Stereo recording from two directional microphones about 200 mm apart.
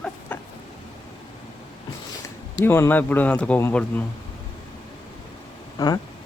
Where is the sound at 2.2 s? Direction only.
15° left (ahead or behind).